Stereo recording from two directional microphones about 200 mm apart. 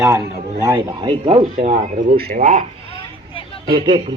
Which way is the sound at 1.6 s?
40° right (ahead or behind).